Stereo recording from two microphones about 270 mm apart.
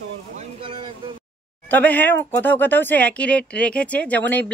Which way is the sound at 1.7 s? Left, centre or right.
Centre.